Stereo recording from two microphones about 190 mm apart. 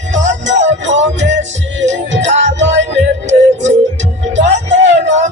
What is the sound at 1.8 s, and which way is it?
Music, 70° right (ahead or behind).